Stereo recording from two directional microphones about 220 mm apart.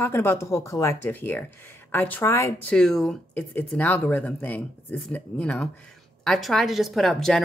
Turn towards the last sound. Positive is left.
turn(degrees=0)  # may be behind; listen again after turning